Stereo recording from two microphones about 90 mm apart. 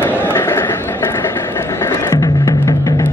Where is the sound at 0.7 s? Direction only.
35° left (ahead or behind).